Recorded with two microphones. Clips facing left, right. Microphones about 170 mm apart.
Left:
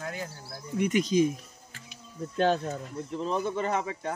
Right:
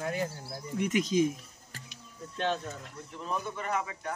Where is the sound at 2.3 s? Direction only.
40° left (ahead or behind).